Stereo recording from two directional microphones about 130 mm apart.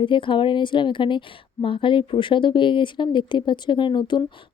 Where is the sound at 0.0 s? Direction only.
40° left (ahead or behind).